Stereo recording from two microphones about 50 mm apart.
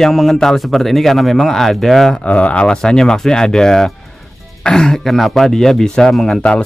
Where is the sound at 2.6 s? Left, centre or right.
Centre.